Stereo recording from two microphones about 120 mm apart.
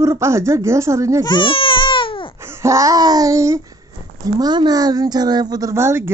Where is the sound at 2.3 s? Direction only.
20° right (ahead or behind).